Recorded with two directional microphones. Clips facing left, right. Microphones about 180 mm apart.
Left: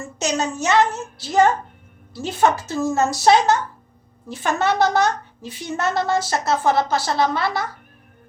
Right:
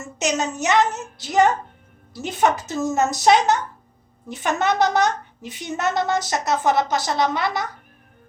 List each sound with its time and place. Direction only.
0.2 s a woman's voice: 20° right (ahead or behind)